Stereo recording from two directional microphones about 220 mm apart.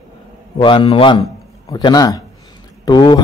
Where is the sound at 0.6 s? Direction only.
20° left (ahead or behind).